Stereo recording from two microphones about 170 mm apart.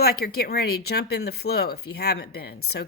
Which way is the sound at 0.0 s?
65° left (ahead or behind).